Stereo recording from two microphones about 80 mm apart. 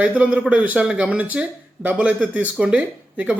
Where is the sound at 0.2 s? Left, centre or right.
Centre.